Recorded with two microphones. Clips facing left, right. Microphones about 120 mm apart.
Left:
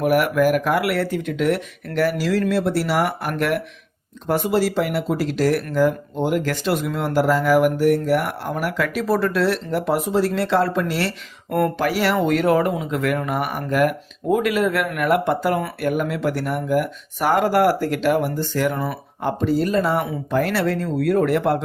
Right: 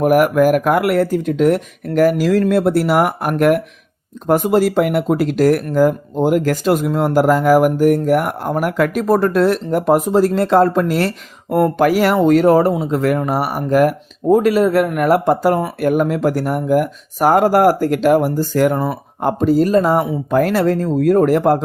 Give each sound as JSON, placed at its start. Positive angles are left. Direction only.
{"t": 0.0, "sound": "speech", "side_deg": -45}